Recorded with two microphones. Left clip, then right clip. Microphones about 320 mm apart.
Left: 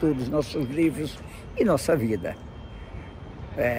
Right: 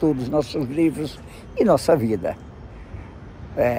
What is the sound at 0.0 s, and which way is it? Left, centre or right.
A man's voice, centre.